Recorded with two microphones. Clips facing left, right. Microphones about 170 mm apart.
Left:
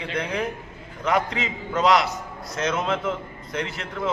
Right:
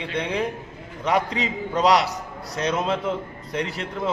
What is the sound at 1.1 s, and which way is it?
A man's voice, 35° right (ahead or behind).